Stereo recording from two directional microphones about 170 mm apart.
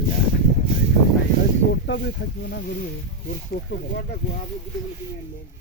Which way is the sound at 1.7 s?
85° left.